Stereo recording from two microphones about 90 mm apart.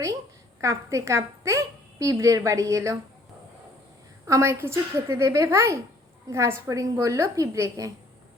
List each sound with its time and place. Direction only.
0.6 s a woman's voice: 35° right (ahead or behind)
4.3 s a woman's voice: 30° right (ahead or behind)